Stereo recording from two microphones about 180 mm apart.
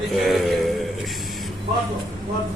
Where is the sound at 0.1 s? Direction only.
Centre (ahead or behind).